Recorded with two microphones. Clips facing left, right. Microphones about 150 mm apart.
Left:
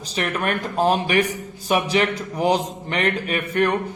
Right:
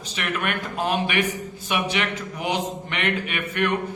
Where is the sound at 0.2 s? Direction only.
35° left (ahead or behind).